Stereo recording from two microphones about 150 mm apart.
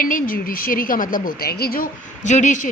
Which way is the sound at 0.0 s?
70° left (ahead or behind).